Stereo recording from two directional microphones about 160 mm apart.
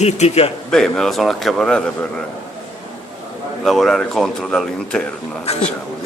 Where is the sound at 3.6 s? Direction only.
Centre (ahead or behind).